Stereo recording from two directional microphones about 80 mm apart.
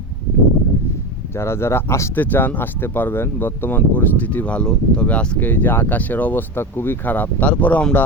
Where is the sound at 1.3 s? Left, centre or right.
Left.